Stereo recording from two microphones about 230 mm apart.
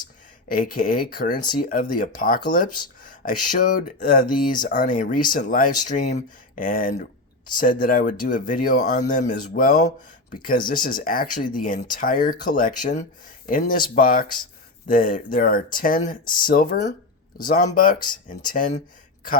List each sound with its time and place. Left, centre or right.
0.4 s speech: left